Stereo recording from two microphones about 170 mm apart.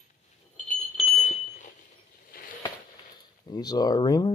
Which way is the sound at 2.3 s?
55° left (ahead or behind).